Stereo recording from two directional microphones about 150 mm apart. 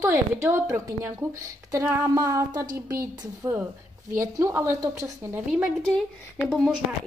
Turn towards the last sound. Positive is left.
turn(degrees=0)  # may be behind; listen again after turning